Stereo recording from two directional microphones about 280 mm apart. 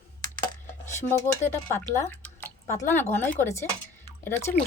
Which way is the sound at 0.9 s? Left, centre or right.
Centre.